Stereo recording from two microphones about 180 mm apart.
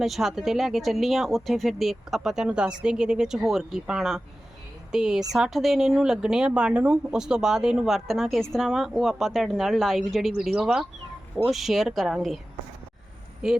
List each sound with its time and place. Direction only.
0.0 s speech: centre (ahead or behind)
13.4 s speech: 5° right (ahead or behind)